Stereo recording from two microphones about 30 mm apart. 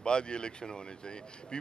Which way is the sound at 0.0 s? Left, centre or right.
Left.